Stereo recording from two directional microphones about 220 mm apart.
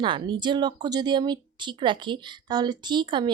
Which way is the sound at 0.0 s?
20° right (ahead or behind).